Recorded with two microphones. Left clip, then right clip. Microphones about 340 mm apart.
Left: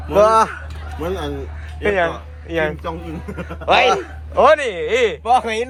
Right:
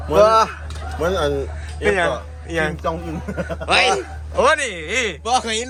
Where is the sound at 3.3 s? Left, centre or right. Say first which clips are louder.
Right 7 dB; right.